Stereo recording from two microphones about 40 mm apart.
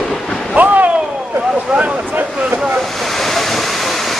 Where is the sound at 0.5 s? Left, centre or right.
Right.